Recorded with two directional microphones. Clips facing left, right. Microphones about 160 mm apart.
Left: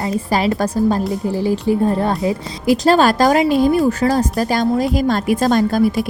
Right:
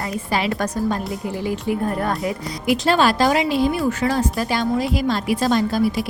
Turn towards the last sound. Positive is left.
turn(degrees=50)  # may be behind; listen again after turning